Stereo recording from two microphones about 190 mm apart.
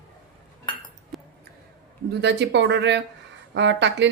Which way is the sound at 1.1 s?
Centre (ahead or behind).